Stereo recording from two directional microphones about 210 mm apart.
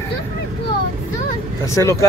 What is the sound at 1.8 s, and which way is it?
Speech, 15° left (ahead or behind).